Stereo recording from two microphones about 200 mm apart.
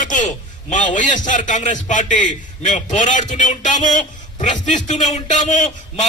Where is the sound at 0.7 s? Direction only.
40° left (ahead or behind).